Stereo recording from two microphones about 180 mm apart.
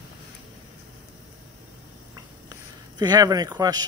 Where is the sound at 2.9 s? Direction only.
20° right (ahead or behind).